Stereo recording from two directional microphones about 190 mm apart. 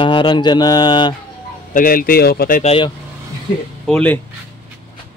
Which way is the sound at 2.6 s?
30° left (ahead or behind).